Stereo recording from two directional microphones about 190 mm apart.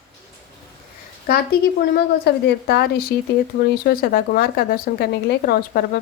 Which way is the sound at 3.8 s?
50° left (ahead or behind).